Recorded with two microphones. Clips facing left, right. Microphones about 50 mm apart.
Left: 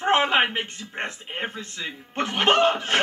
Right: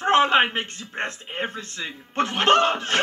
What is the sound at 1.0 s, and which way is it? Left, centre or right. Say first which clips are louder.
A man's voice: right 2 dB; centre.